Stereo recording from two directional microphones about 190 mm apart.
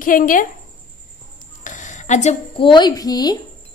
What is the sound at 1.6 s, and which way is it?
A woman's voice, 40° left (ahead or behind).